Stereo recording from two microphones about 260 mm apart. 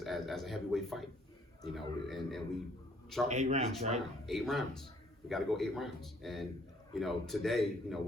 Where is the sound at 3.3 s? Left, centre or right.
Right.